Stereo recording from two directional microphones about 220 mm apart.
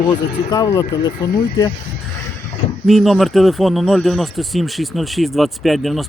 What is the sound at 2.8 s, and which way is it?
Speech, centre (ahead or behind).